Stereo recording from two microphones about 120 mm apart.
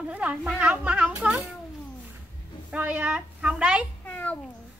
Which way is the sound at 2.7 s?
15° right (ahead or behind).